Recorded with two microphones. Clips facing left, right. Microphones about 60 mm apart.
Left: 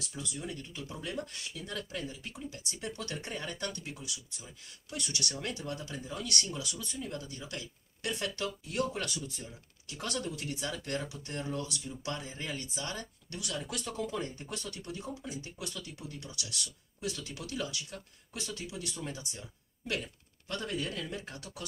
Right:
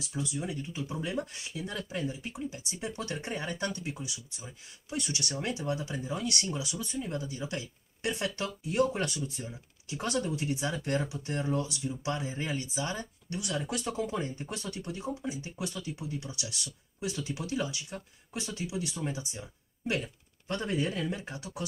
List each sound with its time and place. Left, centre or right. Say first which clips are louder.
0.0 s speech: right 6 dB; centre
8.9 s speech: right 4 dB; right
9.4 s speech: right 5 dB; centre